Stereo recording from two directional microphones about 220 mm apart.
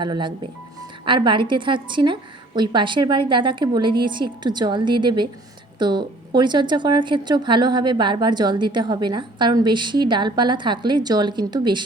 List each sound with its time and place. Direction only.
0.0 s speech: 20° right (ahead or behind)